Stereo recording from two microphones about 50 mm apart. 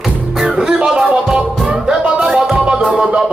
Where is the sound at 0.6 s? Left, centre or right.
Centre.